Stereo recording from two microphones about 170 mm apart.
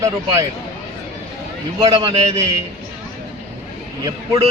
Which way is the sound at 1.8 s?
25° right (ahead or behind).